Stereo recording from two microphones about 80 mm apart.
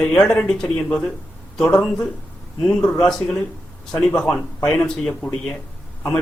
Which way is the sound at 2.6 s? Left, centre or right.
Centre.